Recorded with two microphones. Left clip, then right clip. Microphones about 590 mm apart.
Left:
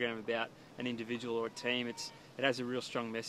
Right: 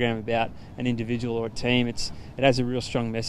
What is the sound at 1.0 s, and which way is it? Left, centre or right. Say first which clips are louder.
Speech: right 6 dB; right.